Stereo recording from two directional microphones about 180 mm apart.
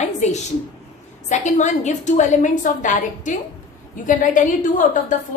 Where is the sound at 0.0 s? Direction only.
40° left (ahead or behind).